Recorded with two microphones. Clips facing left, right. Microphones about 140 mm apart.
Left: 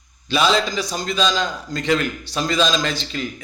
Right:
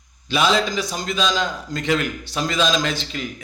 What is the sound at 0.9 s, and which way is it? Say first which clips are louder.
Speech: left 1 dB; 15° right (ahead or behind).